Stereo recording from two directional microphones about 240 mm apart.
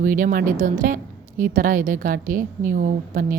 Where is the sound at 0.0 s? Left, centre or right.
Right.